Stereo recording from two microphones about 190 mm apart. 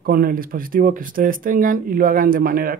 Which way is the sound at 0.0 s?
50° right (ahead or behind).